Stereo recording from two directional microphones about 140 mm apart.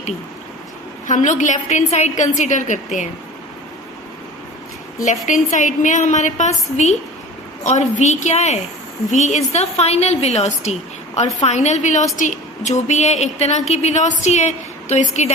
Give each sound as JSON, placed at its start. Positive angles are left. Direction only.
{"t": 1.0, "sound": "a woman's voice", "side_deg": 60}
{"t": 5.0, "sound": "a woman's voice", "side_deg": 60}